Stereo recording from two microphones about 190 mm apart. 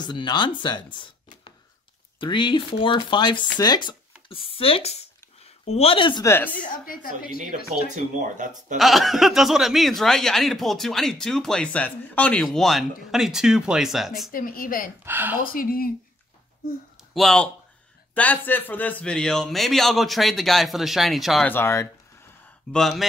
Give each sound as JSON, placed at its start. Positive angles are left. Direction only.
{"t": 0.0, "sound": "speech", "side_deg": 25}
{"t": 0.9, "sound": "a sound", "side_deg": 25}
{"t": 2.1, "sound": "speech", "side_deg": 25}
{"t": 6.2, "sound": "speech", "side_deg": 10}
{"t": 6.6, "sound": "a woman's voice", "side_deg": 45}
{"t": 7.9, "sound": "speech", "side_deg": -40}
{"t": 8.7, "sound": "speech", "side_deg": 0}
{"t": 14.3, "sound": "a woman's voice", "side_deg": 45}
{"t": 15.0, "sound": "speech", "side_deg": -10}
{"t": 15.5, "sound": "a woman's voice", "side_deg": 50}
{"t": 17.1, "sound": "speech", "side_deg": 0}
{"t": 22.7, "sound": "speech", "side_deg": 0}